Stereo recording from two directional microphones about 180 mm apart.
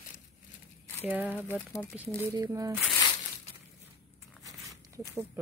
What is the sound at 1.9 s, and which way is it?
Speech, 15° right (ahead or behind).